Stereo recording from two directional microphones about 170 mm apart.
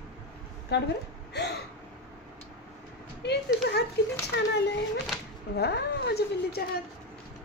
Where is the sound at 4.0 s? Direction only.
80° left.